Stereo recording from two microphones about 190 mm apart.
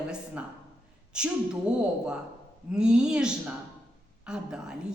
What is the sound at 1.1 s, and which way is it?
A woman's voice, 5° right (ahead or behind).